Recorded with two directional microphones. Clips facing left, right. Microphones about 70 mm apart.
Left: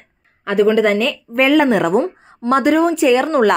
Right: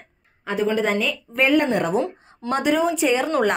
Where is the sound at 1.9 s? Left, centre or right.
Left.